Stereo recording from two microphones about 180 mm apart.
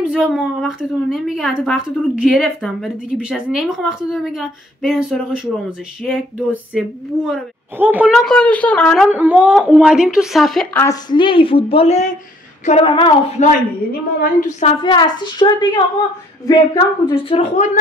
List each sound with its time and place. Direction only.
0.0 s a woman's voice: 5° right (ahead or behind)
9.1 s a woman's voice: 5° right (ahead or behind)
10.8 s a woman's voice: 20° left (ahead or behind)
14.8 s a woman's voice: 25° left (ahead or behind)